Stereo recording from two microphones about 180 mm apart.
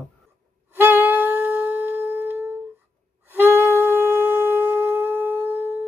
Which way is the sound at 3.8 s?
10° right (ahead or behind).